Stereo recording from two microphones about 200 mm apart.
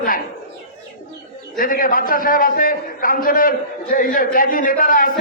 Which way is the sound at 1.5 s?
45° left (ahead or behind).